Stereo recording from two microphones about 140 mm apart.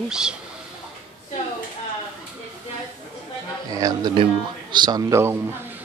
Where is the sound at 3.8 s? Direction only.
25° right (ahead or behind).